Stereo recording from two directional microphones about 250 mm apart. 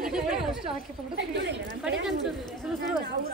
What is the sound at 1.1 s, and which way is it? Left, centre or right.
Speech, right.